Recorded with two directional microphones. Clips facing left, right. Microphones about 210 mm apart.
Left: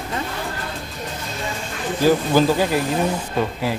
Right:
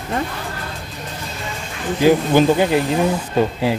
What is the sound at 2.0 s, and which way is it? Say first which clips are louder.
Speech: right 3 dB; 20° right (ahead or behind).